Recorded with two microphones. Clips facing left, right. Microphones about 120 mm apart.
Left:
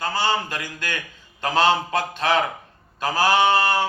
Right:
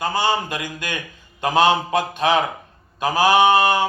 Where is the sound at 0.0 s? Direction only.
15° right (ahead or behind).